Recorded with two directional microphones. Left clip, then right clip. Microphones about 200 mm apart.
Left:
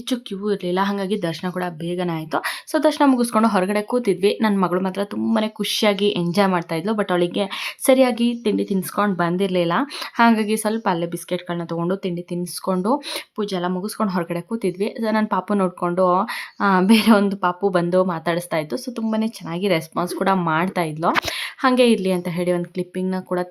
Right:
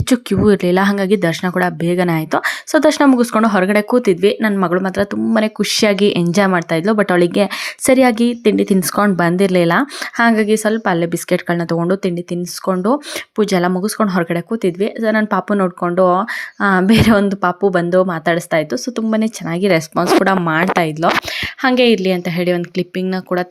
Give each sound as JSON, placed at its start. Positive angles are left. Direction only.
{"t": 0.1, "sound": "speech", "side_deg": -25}